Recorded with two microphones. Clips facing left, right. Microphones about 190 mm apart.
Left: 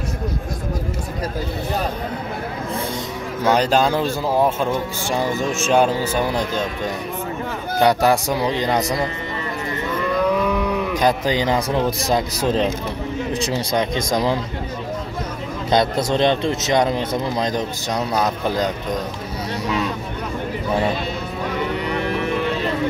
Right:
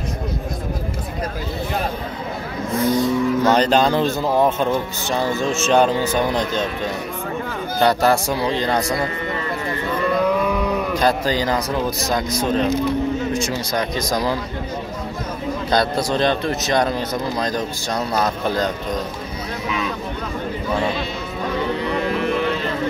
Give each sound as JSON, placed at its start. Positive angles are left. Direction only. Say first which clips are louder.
{"t": 2.7, "sound": "a man's voice", "louder": "right 11 dB", "side_deg": 30}
{"t": 3.4, "sound": "speech", "louder": "left 2 dB", "side_deg": 10}
{"t": 7.8, "sound": "speech", "louder": "even", "side_deg": 15}
{"t": 11.0, "sound": "a man's voice", "louder": "left 1 dB", "side_deg": 15}
{"t": 13.3, "sound": "a man's voice", "louder": "left 1 dB", "side_deg": 30}
{"t": 15.7, "sound": "a man's voice", "louder": "left 2 dB", "side_deg": 20}